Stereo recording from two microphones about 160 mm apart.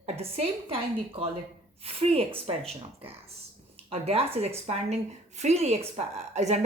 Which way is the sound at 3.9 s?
40° right (ahead or behind).